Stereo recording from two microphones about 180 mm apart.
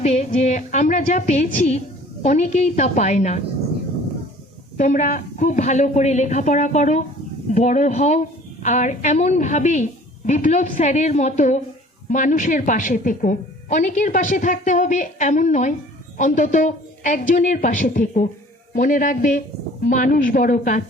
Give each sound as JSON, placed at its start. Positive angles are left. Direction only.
{"t": 0.0, "sound": "a woman's voice", "side_deg": 35}
{"t": 4.8, "sound": "a woman's voice", "side_deg": 45}